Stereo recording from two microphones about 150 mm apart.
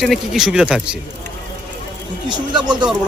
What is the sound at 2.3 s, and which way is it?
Speech, 30° right (ahead or behind).